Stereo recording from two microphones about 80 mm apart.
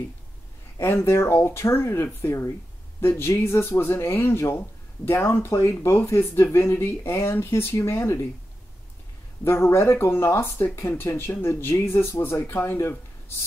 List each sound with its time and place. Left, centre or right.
0.7 s speech: left
9.4 s speech: left